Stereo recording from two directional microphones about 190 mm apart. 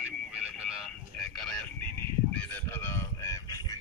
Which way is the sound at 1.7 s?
10° left (ahead or behind).